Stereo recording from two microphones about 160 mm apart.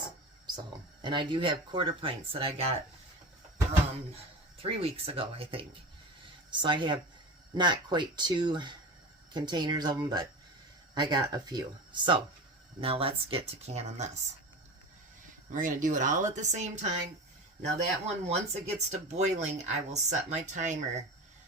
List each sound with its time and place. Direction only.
1.0 s speech: 30° right (ahead or behind)
4.1 s speech: 35° right (ahead or behind)
15.5 s speech: 55° right (ahead or behind)